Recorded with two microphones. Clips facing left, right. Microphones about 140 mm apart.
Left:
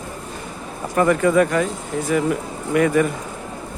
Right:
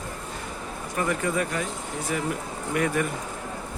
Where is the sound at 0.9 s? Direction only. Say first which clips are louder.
Left 10 dB; 85° left.